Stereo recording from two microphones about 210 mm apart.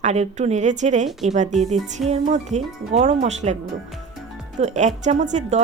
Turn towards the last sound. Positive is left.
turn(degrees=-35)  # may be behind; listen again after turning